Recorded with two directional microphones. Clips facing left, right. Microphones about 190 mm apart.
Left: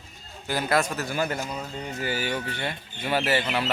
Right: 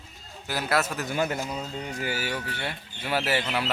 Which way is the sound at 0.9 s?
20° right (ahead or behind).